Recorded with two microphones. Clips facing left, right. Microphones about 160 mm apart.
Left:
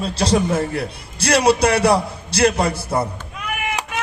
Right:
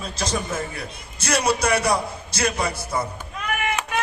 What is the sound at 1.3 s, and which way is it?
A man's voice, 60° left (ahead or behind).